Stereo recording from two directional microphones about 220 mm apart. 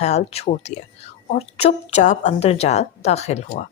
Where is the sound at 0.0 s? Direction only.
30° left (ahead or behind).